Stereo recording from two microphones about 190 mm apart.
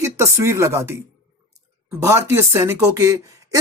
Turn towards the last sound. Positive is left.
turn(degrees=-15)  # may be behind; listen again after turning